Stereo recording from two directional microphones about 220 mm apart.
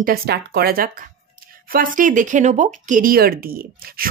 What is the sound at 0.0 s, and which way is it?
Speech, 45° right (ahead or behind).